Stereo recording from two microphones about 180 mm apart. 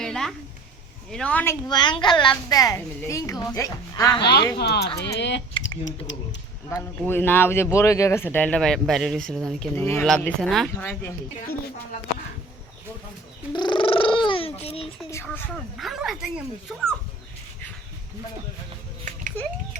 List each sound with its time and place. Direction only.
0.0 s a sound: 5° left (ahead or behind)
1.1 s speech: 5° left (ahead or behind)
1.6 s a woman's voice: 25° left (ahead or behind)
4.5 s speech: 65° left (ahead or behind)
5.1 s speech: 75° left (ahead or behind)
5.6 s speech: 90° left
6.7 s speech: 10° left (ahead or behind)
13.5 s purr: 25° left (ahead or behind)
15.1 s speech: 10° left (ahead or behind)
15.8 s speech: centre (ahead or behind)